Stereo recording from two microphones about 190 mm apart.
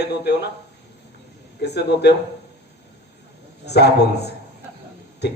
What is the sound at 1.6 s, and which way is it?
Speech, 60° left (ahead or behind).